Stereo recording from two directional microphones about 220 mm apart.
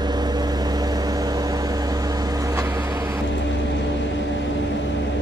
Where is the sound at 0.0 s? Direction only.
20° right (ahead or behind).